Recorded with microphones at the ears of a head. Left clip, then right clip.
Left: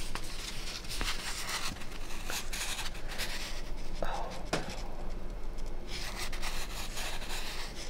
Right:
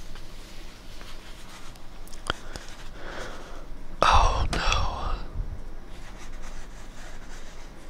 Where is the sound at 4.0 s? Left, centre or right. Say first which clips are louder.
Right 18 dB; right.